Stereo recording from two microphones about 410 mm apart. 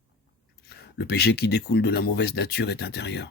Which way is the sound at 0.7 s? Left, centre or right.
Left.